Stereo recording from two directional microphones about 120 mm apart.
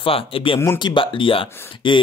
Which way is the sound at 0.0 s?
50° left (ahead or behind).